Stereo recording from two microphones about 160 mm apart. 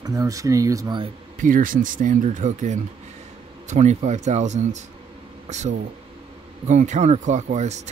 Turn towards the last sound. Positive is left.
turn(degrees=-45)  # may be behind; listen again after turning